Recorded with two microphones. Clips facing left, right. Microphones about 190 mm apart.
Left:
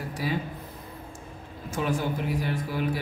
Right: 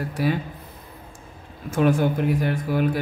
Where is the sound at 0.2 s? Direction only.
65° right (ahead or behind).